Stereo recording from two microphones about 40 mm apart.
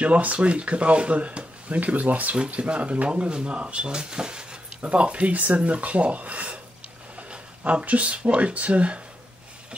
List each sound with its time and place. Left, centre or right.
0.0 s speech: right